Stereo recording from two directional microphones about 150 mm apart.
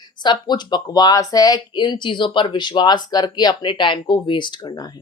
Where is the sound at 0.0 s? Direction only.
30° left (ahead or behind).